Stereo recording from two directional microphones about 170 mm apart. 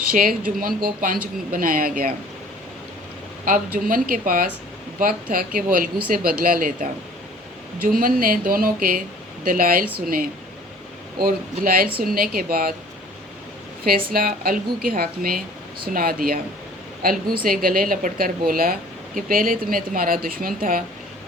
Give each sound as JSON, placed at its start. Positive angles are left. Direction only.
{"t": 0.0, "sound": "speech", "side_deg": -55}
{"t": 3.4, "sound": "speech", "side_deg": -55}
{"t": 7.9, "sound": "speech", "side_deg": -60}
{"t": 11.2, "sound": "speech", "side_deg": -60}
{"t": 14.1, "sound": "speech", "side_deg": -60}